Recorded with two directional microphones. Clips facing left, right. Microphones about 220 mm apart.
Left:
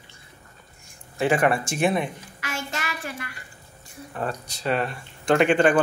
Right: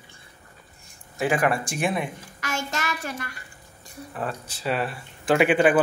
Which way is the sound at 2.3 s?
45° right (ahead or behind).